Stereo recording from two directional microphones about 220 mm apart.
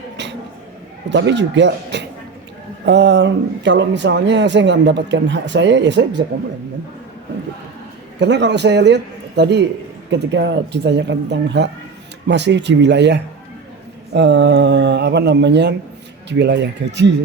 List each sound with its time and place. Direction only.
1.1 s speech: 55° right (ahead or behind)
8.2 s speech: 50° right (ahead or behind)